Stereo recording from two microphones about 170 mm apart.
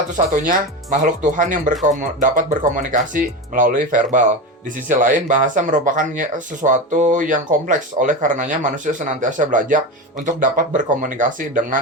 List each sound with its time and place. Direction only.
0.4 s speech: 50° right (ahead or behind)